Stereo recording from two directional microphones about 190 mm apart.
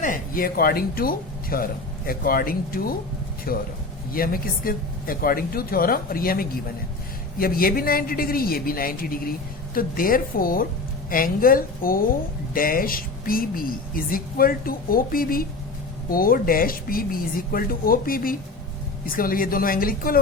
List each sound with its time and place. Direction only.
0.0 s a woman's voice: 45° left (ahead or behind)